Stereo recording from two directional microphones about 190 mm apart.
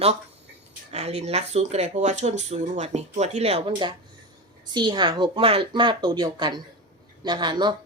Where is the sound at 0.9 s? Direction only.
35° right (ahead or behind).